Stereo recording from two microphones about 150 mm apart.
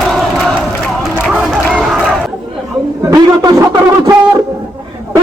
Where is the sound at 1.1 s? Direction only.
10° right (ahead or behind).